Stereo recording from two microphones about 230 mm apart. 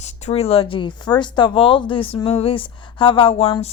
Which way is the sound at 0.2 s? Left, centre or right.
Left.